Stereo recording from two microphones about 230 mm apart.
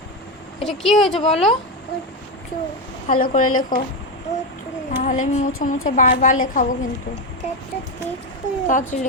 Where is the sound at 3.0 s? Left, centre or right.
Left.